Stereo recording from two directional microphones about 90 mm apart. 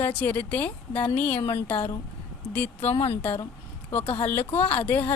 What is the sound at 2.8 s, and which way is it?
Speech, 80° left.